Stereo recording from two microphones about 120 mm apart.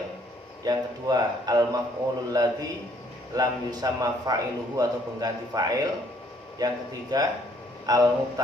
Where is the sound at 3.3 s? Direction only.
30° right (ahead or behind).